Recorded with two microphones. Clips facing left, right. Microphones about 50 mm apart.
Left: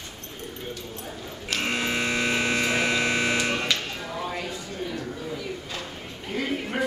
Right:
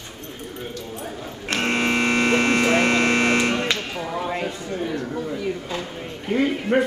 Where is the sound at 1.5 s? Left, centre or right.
Right.